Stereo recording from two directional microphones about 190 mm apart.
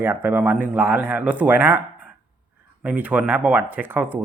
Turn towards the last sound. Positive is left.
turn(degrees=-10)  # may be behind; listen again after turning